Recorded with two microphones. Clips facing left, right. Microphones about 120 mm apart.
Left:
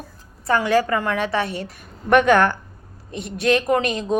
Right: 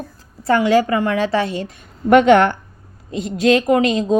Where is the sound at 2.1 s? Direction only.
25° right (ahead or behind).